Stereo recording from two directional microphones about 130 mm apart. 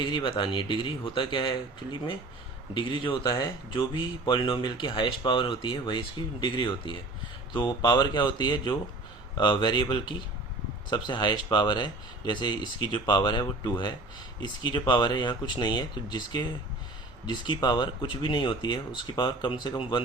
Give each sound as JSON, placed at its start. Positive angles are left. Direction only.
{"t": 0.0, "sound": "speech", "side_deg": 35}
{"t": 3.2, "sound": "speech", "side_deg": 25}